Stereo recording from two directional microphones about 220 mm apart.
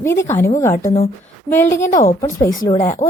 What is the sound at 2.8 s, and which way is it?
Speech, 35° left (ahead or behind).